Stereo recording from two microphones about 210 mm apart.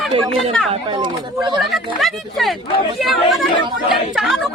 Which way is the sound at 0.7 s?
20° right (ahead or behind).